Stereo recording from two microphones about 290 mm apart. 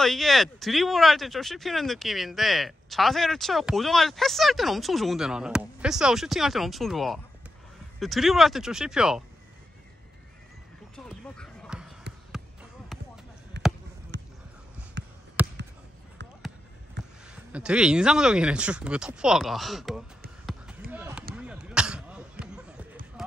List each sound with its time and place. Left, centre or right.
0.0 s speech: centre
11.1 s dog: centre
12.9 s basketball bounce: centre
13.5 s basketball bounce: right
15.4 s a sound: centre
17.3 s speech: centre
20.9 s basketball bounce: centre
21.4 s a sound: centre
23.2 s basketball bounce: centre